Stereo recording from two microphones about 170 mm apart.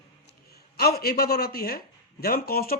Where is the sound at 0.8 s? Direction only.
65° left (ahead or behind).